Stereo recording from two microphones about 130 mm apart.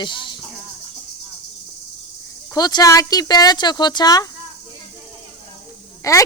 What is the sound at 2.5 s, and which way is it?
Speech, 30° left (ahead or behind).